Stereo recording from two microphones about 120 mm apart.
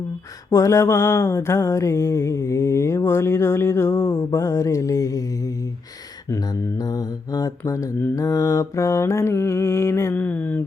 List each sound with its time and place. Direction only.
0.5 s mantra: 25° left (ahead or behind)
6.3 s mantra: 30° left (ahead or behind); by 10.6 s 15° left (ahead or behind)